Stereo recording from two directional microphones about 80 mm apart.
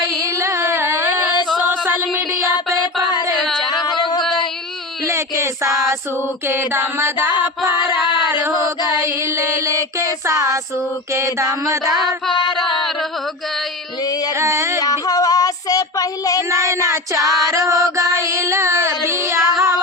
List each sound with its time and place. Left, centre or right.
0.0 s carnatic music: left
0.3 s carnatic music: right
1.8 s music: right
3.6 s singing: left
5.0 s music: right
6.5 s mantra: right
9.0 s child singing: right
12.3 s music: left
14.3 s a sound: right
14.8 s child singing: left
16.5 s child singing: right